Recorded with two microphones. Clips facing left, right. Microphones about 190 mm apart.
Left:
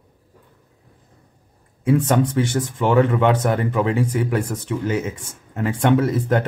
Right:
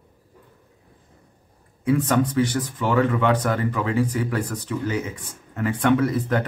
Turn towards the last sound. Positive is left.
turn(degrees=25)  # may be behind; listen again after turning